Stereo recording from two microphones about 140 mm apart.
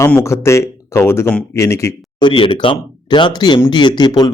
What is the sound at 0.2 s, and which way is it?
Speech, 20° left (ahead or behind).